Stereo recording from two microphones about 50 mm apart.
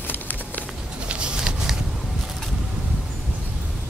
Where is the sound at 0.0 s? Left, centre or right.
Left.